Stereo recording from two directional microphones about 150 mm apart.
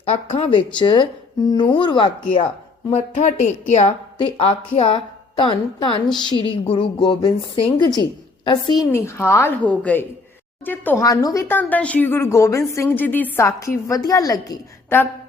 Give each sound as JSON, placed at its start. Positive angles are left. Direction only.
{"t": 0.0, "sound": "a woman's voice", "side_deg": 40}
{"t": 2.9, "sound": "speech", "side_deg": 45}
{"t": 4.2, "sound": "a woman's voice", "side_deg": 35}
{"t": 8.9, "sound": "a woman's voice", "side_deg": 15}
{"t": 11.0, "sound": "a woman's voice", "side_deg": 25}
{"t": 11.4, "sound": "a woman's voice", "side_deg": 10}